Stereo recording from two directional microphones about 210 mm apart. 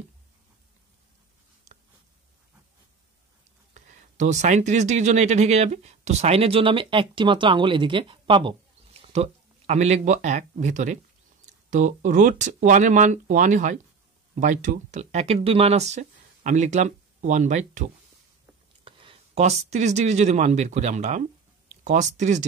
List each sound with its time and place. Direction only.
3.7 s speech: 35° right (ahead or behind)
18.9 s speech: 25° right (ahead or behind)